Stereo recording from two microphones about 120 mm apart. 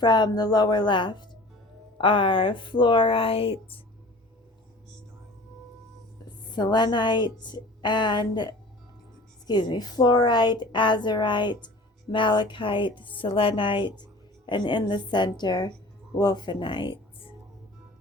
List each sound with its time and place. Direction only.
0.0 s a woman's voice: 35° left (ahead or behind)
6.5 s a woman's voice: 40° left (ahead or behind)